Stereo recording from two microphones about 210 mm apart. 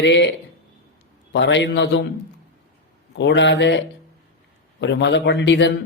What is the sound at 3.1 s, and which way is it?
A man's voice, 60° left (ahead or behind).